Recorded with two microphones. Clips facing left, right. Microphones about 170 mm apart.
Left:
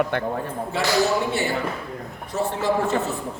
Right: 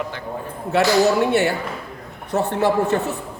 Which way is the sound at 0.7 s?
65° right (ahead or behind).